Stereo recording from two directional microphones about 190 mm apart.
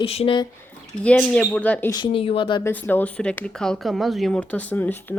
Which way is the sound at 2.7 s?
10° left (ahead or behind).